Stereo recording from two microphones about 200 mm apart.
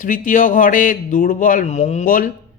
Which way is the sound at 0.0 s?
40° left (ahead or behind).